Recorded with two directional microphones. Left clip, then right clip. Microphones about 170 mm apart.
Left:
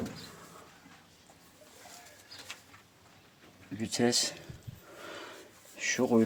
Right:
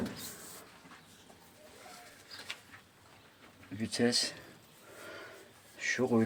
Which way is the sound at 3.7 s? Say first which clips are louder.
Left 2 dB; 25° left (ahead or behind).